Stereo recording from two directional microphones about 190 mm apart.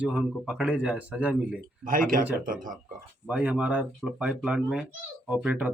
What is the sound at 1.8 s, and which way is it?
Speech, 45° right (ahead or behind).